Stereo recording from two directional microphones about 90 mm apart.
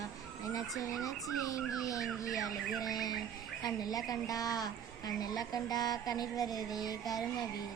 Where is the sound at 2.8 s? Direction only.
45° left (ahead or behind).